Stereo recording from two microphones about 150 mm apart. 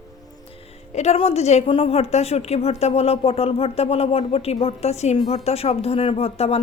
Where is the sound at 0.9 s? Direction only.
45° left (ahead or behind).